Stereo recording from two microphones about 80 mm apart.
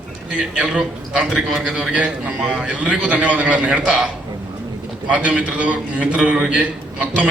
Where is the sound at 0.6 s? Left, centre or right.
Centre.